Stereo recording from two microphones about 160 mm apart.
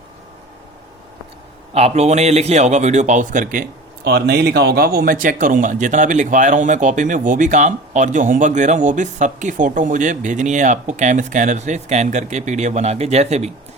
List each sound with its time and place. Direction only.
1.7 s speech: 45° right (ahead or behind)
4.0 s speech: 90° right; by 13.5 s 45° right (ahead or behind)